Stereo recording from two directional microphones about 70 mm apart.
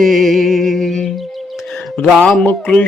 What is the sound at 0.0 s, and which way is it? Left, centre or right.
Music, centre.